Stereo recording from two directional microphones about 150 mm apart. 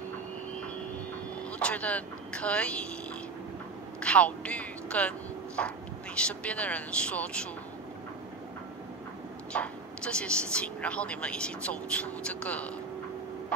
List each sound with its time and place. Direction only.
1.6 s speech: 10° left (ahead or behind)
4.0 s speech: 10° left (ahead or behind)
9.5 s speech: 5° left (ahead or behind)